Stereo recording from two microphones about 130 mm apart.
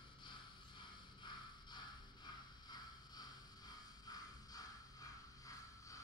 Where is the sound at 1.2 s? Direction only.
35° left (ahead or behind).